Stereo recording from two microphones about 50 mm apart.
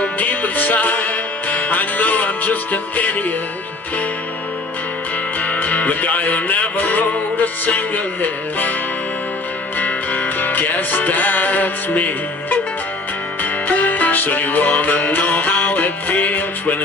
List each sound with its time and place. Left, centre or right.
0.0 s music: left
5.4 s music: left
9.8 s music: left